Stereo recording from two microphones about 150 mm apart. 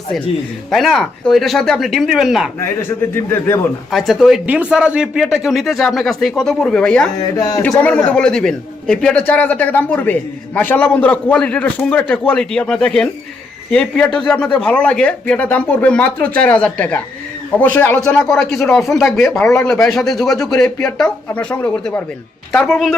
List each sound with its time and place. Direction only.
0.7 s speech: centre (ahead or behind)
3.2 s a man's voice: 15° left (ahead or behind)
3.9 s speech: centre (ahead or behind)
7.2 s speech: 25° left (ahead or behind)
7.8 s a man's voice: 10° left (ahead or behind)